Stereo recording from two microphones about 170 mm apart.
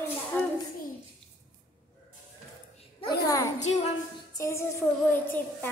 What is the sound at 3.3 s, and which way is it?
Speech, 15° left (ahead or behind).